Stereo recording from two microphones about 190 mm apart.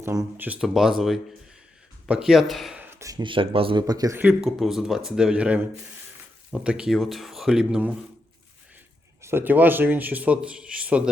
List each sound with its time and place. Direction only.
0.0 s speech: 15° right (ahead or behind)
2.9 s speech: 15° right (ahead or behind)
4.2 s speech: 5° right (ahead or behind)
9.2 s speech: 10° right (ahead or behind)